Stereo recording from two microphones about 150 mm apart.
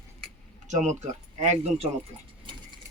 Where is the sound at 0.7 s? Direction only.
50° right (ahead or behind).